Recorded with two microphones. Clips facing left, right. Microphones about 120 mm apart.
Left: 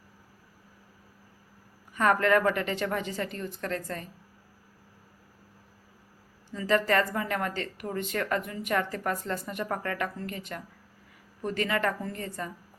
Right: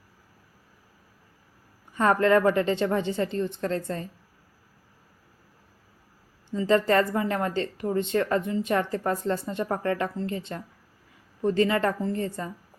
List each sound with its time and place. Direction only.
2.0 s a woman's voice: 25° right (ahead or behind)
6.5 s a woman's voice: 25° right (ahead or behind)